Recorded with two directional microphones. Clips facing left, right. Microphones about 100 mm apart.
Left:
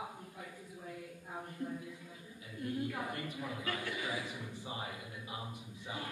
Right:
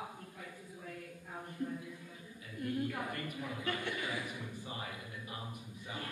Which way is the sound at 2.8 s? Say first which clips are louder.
Even; 10° left (ahead or behind).